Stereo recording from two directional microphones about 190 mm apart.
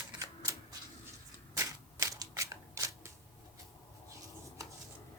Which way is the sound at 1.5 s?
15° right (ahead or behind).